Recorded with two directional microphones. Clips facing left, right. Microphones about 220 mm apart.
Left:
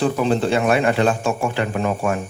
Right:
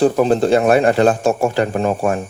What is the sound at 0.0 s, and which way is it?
A man's voice, 40° right (ahead or behind).